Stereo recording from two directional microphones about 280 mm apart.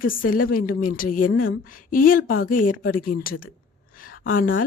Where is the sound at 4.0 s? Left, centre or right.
Left.